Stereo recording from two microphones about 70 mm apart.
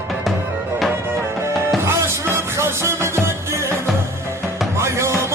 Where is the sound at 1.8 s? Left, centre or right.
Right.